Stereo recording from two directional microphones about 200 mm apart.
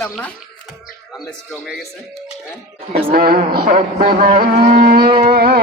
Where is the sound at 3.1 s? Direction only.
50° right (ahead or behind).